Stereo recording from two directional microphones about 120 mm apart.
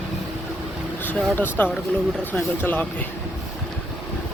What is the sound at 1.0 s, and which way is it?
Speech, 15° left (ahead or behind).